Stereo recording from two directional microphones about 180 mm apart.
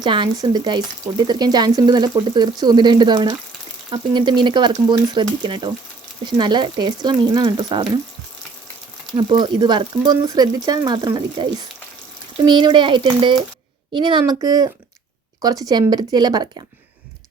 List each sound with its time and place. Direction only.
0.0 s speech: 25° right (ahead or behind)
9.1 s speech: 25° right (ahead or behind)
12.5 s speech: 25° right (ahead or behind)